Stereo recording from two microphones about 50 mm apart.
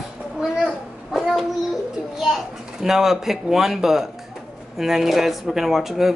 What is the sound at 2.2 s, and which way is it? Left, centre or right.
Speech, centre.